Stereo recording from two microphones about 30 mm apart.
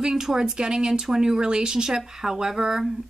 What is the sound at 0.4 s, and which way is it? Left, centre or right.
Speech, right.